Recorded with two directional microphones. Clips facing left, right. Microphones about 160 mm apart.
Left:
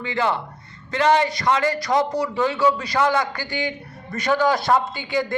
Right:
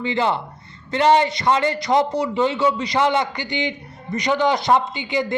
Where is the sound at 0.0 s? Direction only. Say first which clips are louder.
Right 2 dB; 25° right (ahead or behind).